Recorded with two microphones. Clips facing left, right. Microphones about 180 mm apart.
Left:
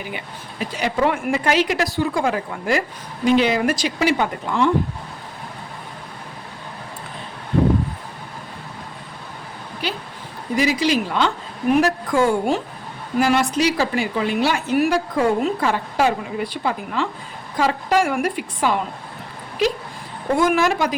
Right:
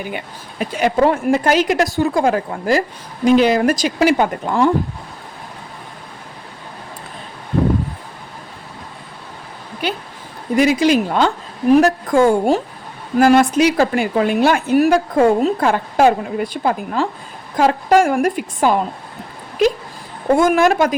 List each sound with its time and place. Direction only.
0.6 s a woman's voice: 50° right (ahead or behind)
1.0 s a woman's voice: 40° right (ahead or behind)
9.8 s a woman's voice: 55° right (ahead or behind)
20.3 s a woman's voice: 45° right (ahead or behind)